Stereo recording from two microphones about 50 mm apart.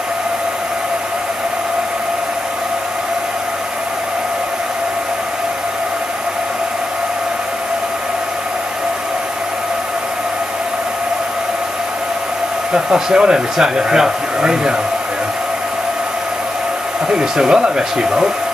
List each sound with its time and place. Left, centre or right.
12.7 s speech: centre
17.1 s speech: centre